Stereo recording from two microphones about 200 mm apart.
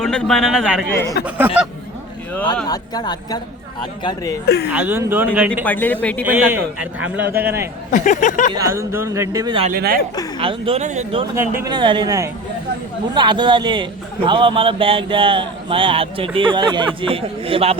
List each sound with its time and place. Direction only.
0.0 s a man's voice: centre (ahead or behind)
2.6 s a woman's voice: 20° left (ahead or behind)
4.4 s speech: 55° left (ahead or behind)
4.7 s speech: 5° right (ahead or behind)
5.6 s speech: 10° left (ahead or behind)
6.2 s speech: 10° right (ahead or behind)
7.9 s speech: 40° left (ahead or behind)
8.5 s speech: 15° right (ahead or behind)
9.6 s speech: 50° right (ahead or behind)
10.4 s speech: 25° right (ahead or behind)
11.3 s speech: 15° right (ahead or behind)